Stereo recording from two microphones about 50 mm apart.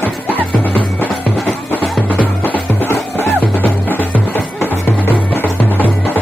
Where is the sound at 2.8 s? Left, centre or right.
Left.